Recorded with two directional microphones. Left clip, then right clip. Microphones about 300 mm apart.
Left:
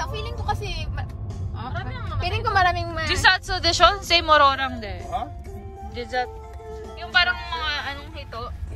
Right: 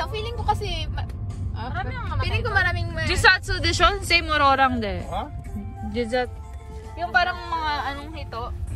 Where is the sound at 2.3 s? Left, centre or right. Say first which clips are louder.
Left 3 dB; left.